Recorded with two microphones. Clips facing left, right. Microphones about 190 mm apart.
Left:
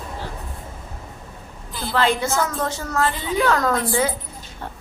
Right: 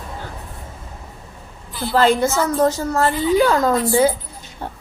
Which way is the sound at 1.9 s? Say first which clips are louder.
Right 5 dB; 40° right (ahead or behind).